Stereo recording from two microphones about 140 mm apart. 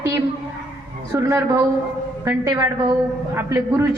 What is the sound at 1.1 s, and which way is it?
A woman's voice, 20° right (ahead or behind).